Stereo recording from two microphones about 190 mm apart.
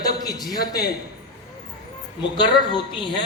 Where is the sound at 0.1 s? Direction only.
20° left (ahead or behind).